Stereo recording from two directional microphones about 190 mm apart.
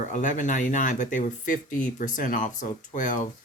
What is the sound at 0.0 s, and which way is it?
Speech, 40° left (ahead or behind).